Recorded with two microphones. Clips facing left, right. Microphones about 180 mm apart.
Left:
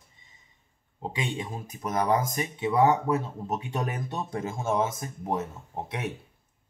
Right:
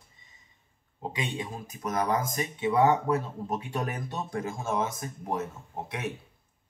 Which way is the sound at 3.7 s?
20° left (ahead or behind).